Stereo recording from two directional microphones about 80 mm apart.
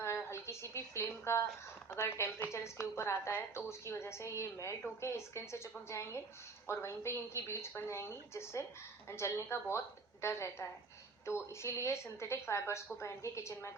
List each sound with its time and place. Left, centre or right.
0.0 s a sound: left
1.9 s a woman's voice: left
2.5 s a woman's voice: left